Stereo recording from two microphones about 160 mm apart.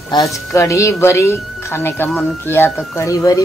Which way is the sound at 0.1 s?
20° left (ahead or behind).